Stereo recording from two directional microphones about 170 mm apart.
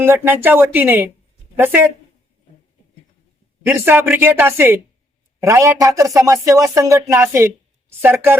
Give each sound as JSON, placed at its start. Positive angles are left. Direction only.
{"t": 0.0, "sound": "speech", "side_deg": -15}
{"t": 3.7, "sound": "a man's voice", "side_deg": -10}